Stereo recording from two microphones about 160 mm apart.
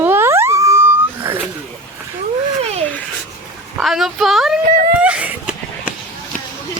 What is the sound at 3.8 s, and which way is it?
Speech, centre (ahead or behind).